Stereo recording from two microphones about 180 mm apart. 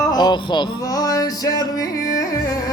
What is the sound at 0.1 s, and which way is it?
Music, 25° left (ahead or behind).